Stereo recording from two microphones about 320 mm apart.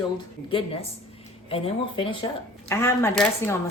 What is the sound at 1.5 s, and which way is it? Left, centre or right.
Speech, centre.